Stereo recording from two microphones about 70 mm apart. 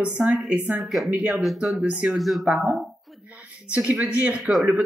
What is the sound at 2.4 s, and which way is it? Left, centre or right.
Speech, centre.